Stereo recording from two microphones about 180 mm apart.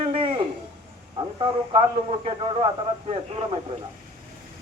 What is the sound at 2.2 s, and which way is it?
Speech, 30° right (ahead or behind).